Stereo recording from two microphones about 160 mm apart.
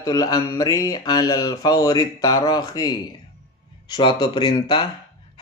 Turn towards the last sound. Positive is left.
turn(degrees=30)  # may be behind; listen again after turning